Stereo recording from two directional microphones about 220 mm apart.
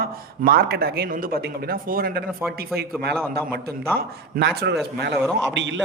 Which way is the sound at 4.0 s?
45° right (ahead or behind).